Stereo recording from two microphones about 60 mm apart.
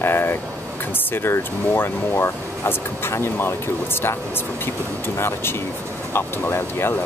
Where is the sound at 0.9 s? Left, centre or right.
Left.